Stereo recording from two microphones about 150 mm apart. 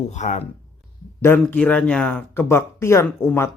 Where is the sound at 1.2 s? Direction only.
15° left (ahead or behind).